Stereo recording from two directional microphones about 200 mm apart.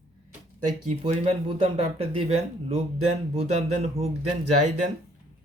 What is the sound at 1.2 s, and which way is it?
Speech, 30° right (ahead or behind).